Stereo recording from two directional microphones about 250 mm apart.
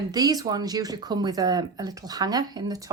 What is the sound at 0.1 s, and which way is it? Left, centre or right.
Speech, centre.